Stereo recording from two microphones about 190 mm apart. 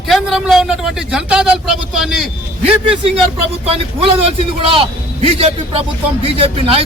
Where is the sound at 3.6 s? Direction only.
30° right (ahead or behind).